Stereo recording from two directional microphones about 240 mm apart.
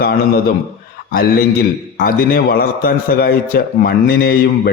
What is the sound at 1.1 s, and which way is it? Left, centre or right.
A man's voice, left.